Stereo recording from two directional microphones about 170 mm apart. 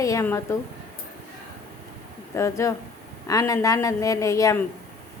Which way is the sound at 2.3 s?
15° left (ahead or behind).